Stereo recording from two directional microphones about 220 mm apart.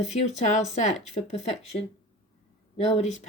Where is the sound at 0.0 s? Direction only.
30° left (ahead or behind).